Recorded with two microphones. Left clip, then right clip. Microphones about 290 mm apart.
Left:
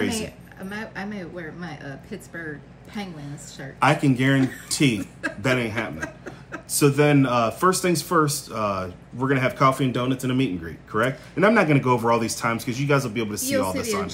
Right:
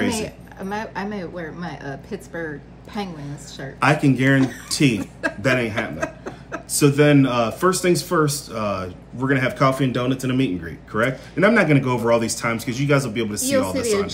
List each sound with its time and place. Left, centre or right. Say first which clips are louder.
0.1 s a woman's voice: right 4 dB; centre
3.8 s speech: right 2 dB; centre
4.9 s a woman's voice: right 4 dB; centre
5.4 s speech: right 3 dB; centre
5.9 s chuckle: right 6 dB; centre
6.7 s speech: right 3 dB; centre